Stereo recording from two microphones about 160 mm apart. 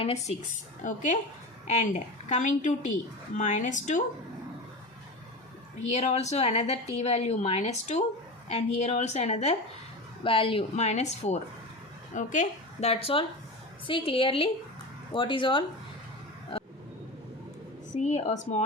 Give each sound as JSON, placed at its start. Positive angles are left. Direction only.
{"t": 0.0, "sound": "a woman's voice", "side_deg": 40}
{"t": 5.9, "sound": "a woman's voice", "side_deg": 45}
{"t": 17.9, "sound": "a woman's voice", "side_deg": 45}